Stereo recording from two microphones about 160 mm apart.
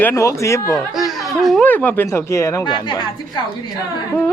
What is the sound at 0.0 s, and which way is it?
Speech, 15° left (ahead or behind).